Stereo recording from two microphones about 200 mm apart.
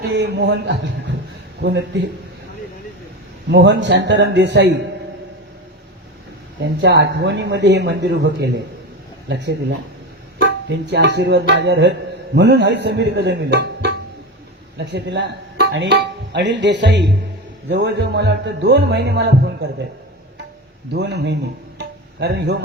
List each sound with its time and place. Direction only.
0.1 s a man's voice: 60° right (ahead or behind)
3.5 s a man's voice: 60° right (ahead or behind)
6.8 s a man's voice: 60° right (ahead or behind)
10.4 s music: 60° right (ahead or behind)
14.8 s a man's voice: 60° right (ahead or behind)
20.9 s a man's voice: 60° right (ahead or behind)
21.8 s music: 55° right (ahead or behind)